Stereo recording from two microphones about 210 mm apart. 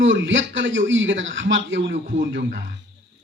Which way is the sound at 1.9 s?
40° right (ahead or behind).